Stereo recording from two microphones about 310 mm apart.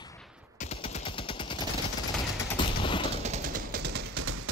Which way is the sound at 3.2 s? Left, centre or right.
Right.